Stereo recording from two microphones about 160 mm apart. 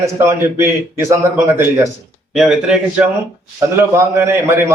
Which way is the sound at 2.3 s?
5° right (ahead or behind).